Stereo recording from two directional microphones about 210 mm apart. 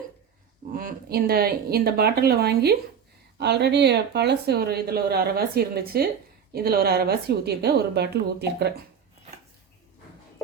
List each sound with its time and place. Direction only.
0.7 s speech: 40° right (ahead or behind)